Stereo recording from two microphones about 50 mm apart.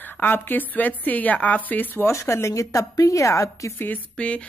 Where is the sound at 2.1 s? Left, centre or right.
Left.